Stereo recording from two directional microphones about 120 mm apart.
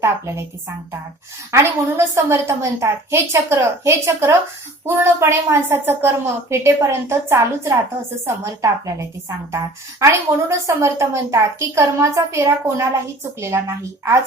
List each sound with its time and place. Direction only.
0.0 s a woman's voice: 20° right (ahead or behind)
1.5 s a woman's voice: 25° right (ahead or behind)